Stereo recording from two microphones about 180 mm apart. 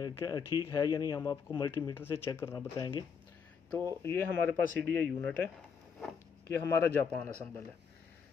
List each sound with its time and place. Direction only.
0.0 s speech: 20° left (ahead or behind)
6.6 s speech: 15° left (ahead or behind)